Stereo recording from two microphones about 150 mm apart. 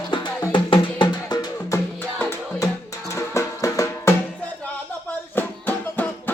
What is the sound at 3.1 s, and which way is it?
Music, 20° left (ahead or behind).